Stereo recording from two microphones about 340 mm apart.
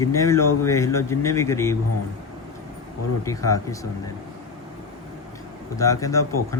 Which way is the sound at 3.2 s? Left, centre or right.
Centre.